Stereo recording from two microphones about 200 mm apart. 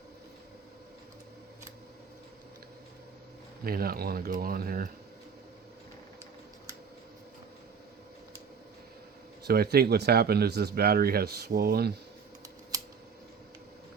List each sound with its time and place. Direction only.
3.6 s speech: 50° right (ahead or behind)
9.5 s speech: 50° right (ahead or behind)